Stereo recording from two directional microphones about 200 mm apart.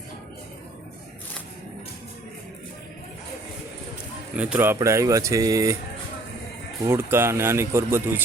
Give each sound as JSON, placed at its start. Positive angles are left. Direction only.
{"t": 4.4, "sound": "speech", "side_deg": -10}
{"t": 6.8, "sound": "speech", "side_deg": -10}